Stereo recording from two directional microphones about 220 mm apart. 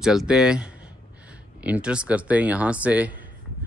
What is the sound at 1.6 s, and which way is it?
Speech, 5° right (ahead or behind).